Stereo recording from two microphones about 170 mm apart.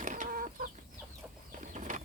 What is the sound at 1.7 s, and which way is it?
Bird, 45° right (ahead or behind).